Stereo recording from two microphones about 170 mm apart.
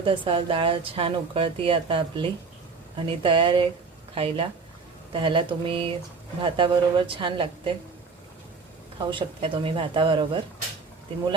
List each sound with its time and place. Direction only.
0.0 s speech: 30° right (ahead or behind)
9.0 s speech: 30° right (ahead or behind)